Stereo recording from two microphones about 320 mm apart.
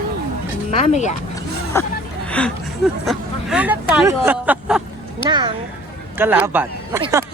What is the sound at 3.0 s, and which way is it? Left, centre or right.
Speech, centre.